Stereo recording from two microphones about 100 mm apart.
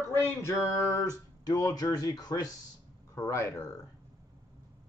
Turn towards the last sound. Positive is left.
turn(degrees=30)  # may be behind; listen again after turning